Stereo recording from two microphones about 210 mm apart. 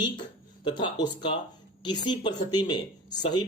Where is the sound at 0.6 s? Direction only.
20° left (ahead or behind).